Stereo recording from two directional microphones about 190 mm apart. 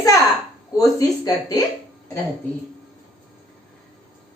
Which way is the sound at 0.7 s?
20° left (ahead or behind).